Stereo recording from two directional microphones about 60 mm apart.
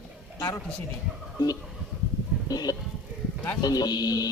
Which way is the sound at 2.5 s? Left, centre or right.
Left.